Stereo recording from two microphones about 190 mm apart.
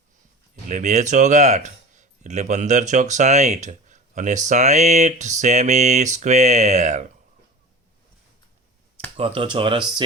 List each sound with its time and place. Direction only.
0.7 s speech: 40° right (ahead or behind)
9.1 s speech: 30° right (ahead or behind)